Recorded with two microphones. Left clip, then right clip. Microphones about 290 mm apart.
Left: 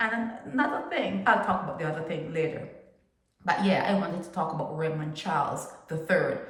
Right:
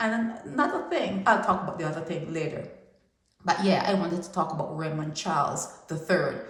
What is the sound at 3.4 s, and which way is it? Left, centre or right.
Speech, centre.